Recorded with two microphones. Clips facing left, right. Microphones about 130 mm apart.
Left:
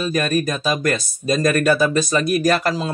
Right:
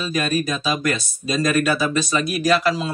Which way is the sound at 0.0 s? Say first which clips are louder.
Left 2 dB; 45° left (ahead or behind).